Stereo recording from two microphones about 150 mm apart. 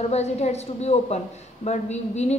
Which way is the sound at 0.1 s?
45° left (ahead or behind).